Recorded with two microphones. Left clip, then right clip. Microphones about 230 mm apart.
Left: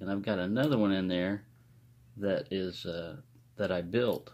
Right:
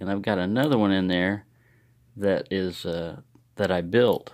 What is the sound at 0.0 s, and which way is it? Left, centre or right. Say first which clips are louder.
Speech: right 7 dB; right.